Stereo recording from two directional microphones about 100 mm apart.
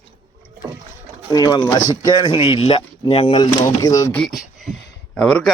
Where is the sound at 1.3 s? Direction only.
40° left (ahead or behind); by 3.4 s 70° left (ahead or behind).